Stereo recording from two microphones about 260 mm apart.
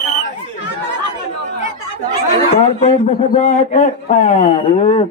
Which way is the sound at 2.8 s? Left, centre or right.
Left.